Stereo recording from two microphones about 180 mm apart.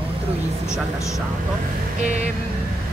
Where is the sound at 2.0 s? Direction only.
40° right (ahead or behind).